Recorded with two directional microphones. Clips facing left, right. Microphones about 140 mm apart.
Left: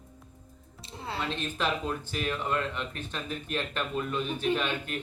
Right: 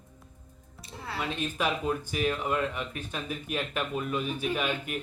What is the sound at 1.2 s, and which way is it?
Speech, 10° right (ahead or behind).